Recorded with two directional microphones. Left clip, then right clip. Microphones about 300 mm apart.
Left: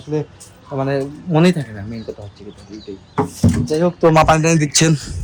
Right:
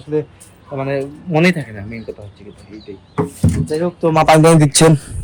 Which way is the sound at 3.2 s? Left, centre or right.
Left.